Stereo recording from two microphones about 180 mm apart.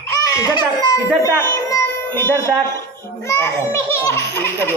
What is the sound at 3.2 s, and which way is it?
A child's voice, 15° left (ahead or behind).